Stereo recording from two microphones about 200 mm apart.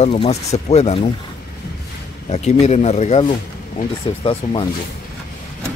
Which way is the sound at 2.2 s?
30° left (ahead or behind).